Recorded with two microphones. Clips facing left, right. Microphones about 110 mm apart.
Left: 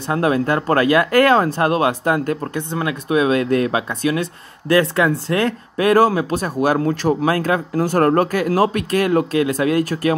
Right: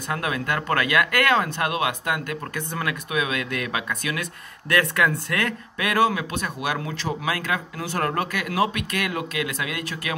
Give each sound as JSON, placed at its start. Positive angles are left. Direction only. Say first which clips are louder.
{"t": 0.1, "sound": "speech", "louder": "left 9 dB", "side_deg": 35}